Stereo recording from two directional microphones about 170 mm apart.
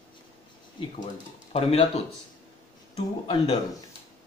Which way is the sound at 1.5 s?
35° left (ahead or behind).